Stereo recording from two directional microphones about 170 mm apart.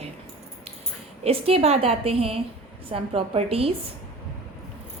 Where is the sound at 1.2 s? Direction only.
35° right (ahead or behind).